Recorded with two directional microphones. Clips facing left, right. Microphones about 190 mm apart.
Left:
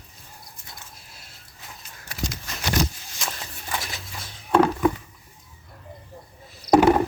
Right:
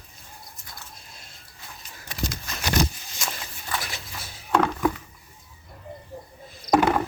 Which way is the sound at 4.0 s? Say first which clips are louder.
Even; 5° right (ahead or behind).